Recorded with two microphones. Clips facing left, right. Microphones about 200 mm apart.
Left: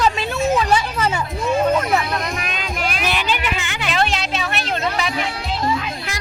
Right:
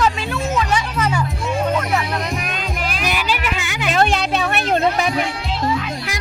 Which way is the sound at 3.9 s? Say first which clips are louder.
Right 4 dB; 50° right (ahead or behind).